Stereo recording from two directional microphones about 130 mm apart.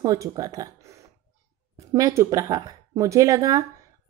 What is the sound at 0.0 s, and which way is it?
A woman's voice, 25° right (ahead or behind).